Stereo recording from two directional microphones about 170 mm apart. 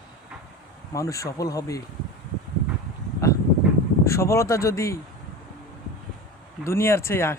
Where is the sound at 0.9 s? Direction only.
20° left (ahead or behind).